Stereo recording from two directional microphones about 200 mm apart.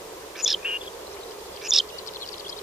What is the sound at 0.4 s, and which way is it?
Bird, 5° right (ahead or behind).